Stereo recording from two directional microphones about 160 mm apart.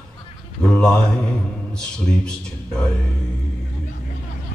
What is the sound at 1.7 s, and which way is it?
A man's voice, 5° left (ahead or behind).